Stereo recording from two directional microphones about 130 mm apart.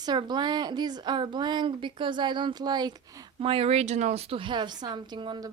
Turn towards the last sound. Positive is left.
turn(degrees=-35)  # may be behind; listen again after turning